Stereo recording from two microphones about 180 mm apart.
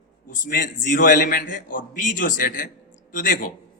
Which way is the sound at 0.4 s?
50° left (ahead or behind).